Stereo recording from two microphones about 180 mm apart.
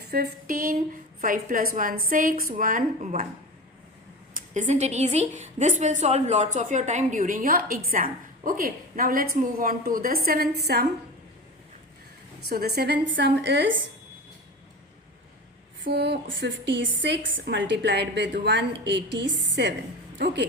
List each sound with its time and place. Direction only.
0.1 s a woman's voice: 55° right (ahead or behind)
4.4 s a woman's voice: 45° right (ahead or behind)
12.5 s a woman's voice: 60° right (ahead or behind); by 13.7 s 80° right
15.8 s a woman's voice: 65° right (ahead or behind)